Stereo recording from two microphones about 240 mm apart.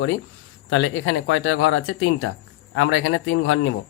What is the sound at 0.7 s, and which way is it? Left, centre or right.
Speech, left.